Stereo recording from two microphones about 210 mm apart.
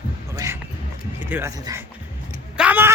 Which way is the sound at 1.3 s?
15° right (ahead or behind).